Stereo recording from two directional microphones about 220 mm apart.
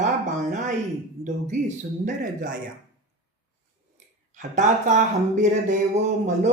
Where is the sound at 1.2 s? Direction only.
35° right (ahead or behind).